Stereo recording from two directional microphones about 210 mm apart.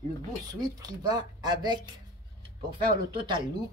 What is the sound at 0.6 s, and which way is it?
Speech, 20° right (ahead or behind).